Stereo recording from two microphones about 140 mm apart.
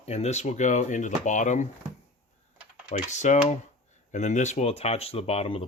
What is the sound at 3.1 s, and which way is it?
Speech, 55° left (ahead or behind).